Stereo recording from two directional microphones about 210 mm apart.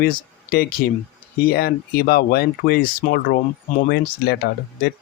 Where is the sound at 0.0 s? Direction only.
45° left (ahead or behind).